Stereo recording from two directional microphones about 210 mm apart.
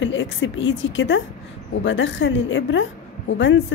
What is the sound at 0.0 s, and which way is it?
A woman's voice, 65° left (ahead or behind).